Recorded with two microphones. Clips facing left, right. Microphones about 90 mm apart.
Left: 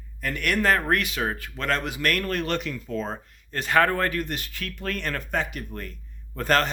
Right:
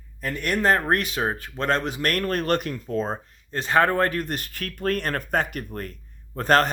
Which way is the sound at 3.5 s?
25° right (ahead or behind).